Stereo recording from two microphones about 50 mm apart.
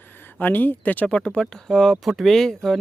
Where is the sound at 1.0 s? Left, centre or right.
Left.